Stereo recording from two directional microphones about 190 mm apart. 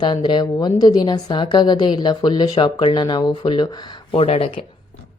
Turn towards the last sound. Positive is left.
turn(degrees=30)  # may be behind; listen again after turning